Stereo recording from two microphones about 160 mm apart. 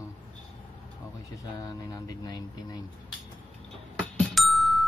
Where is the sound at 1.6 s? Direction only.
20° left (ahead or behind).